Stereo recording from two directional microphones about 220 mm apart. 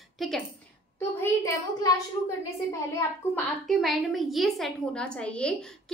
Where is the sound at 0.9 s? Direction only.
15° left (ahead or behind).